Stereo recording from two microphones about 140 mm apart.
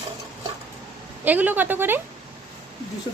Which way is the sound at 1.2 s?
10° right (ahead or behind).